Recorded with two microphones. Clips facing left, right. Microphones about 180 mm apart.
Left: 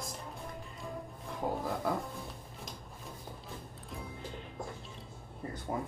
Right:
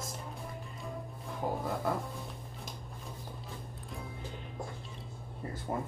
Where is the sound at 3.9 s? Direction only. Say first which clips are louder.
Even; centre (ahead or behind).